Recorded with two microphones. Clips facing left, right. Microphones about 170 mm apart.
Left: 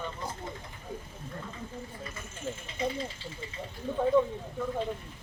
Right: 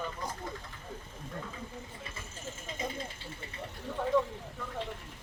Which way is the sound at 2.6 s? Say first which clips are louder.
Left 4 dB; 50° right (ahead or behind).